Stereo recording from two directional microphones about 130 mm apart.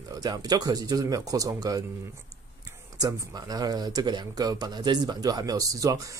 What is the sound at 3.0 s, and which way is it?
Speech, 30° right (ahead or behind).